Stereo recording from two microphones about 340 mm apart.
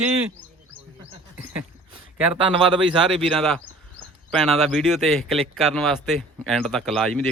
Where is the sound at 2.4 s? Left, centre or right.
Centre.